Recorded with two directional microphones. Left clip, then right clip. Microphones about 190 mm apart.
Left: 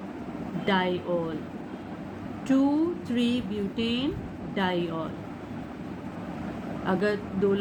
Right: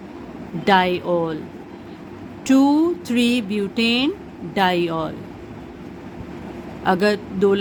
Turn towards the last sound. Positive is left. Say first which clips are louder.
# right 8 dB
turn(degrees=-65)  # may be behind; listen again after turning